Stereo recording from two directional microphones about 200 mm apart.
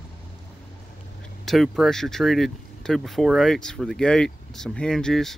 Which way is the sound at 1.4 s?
Centre (ahead or behind).